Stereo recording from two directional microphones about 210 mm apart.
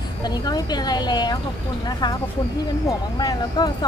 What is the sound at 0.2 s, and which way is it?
Speech, 20° left (ahead or behind).